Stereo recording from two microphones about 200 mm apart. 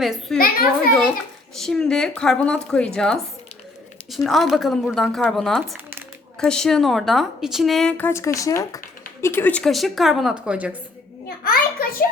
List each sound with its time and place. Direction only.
0.0 s a woman's voice: centre (ahead or behind)
0.3 s a child's voice: 45° left (ahead or behind)
1.5 s a woman's voice: centre (ahead or behind)
11.4 s a sound: 45° left (ahead or behind)